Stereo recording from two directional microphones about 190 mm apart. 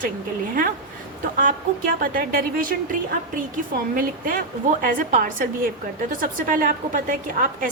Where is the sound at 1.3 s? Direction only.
45° right (ahead or behind).